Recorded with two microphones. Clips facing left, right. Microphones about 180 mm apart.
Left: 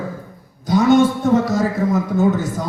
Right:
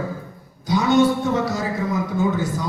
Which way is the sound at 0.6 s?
50° left (ahead or behind).